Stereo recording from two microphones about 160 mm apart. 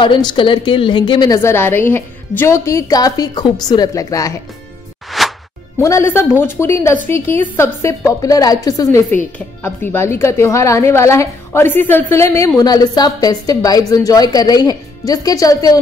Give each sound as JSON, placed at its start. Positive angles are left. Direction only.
{"t": 0.0, "sound": "a woman's voice", "side_deg": 30}
{"t": 1.4, "sound": "a woman's voice", "side_deg": 15}
{"t": 5.2, "sound": "music", "side_deg": 0}
{"t": 5.8, "sound": "a woman's voice", "side_deg": 20}